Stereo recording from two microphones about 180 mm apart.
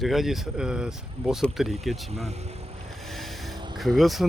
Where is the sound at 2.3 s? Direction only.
35° right (ahead or behind).